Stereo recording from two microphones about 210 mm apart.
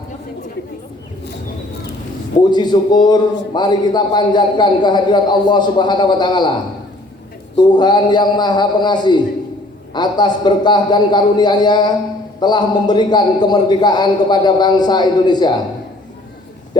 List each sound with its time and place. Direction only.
2.5 s a man's voice: 20° left (ahead or behind)
7.5 s a man's voice: 20° left (ahead or behind)